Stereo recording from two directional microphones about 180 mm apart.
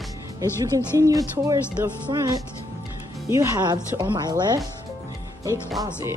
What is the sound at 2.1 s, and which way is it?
Speech, 25° right (ahead or behind).